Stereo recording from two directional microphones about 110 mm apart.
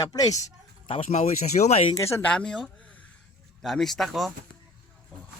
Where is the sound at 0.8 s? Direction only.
60° left (ahead or behind); by 1.9 s 80° left.